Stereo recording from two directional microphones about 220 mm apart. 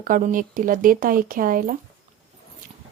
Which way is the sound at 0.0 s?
40° right (ahead or behind).